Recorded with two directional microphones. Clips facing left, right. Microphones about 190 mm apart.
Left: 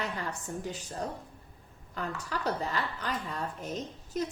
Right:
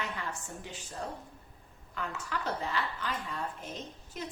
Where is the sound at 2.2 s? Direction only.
40° left (ahead or behind).